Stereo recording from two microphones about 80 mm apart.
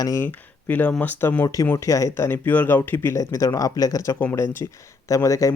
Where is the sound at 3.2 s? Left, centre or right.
Left.